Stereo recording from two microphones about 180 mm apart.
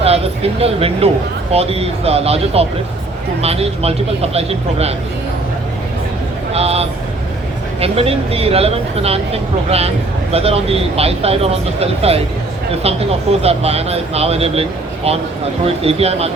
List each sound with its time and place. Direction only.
0.0 s speech: 35° right (ahead or behind)
6.5 s vehicle: 35° right (ahead or behind)
7.8 s speech: 35° right (ahead or behind)